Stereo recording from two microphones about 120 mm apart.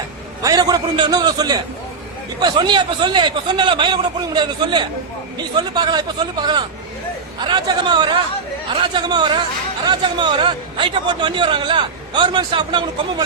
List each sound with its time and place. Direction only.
0.4 s speech: 35° right (ahead or behind)